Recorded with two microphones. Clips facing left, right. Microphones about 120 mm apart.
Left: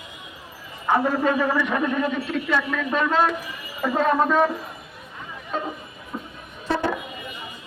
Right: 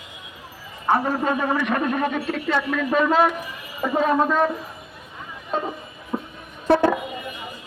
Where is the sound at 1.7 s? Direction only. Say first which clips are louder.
Right 1 dB; 50° right (ahead or behind).